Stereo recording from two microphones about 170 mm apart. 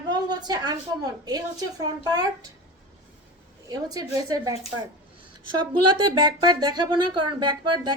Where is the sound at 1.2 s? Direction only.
20° right (ahead or behind).